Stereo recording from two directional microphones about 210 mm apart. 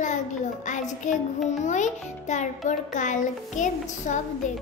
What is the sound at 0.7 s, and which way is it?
Music, 35° left (ahead or behind).